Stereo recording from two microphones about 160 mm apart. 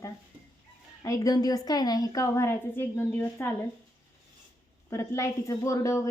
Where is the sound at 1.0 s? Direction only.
20° left (ahead or behind).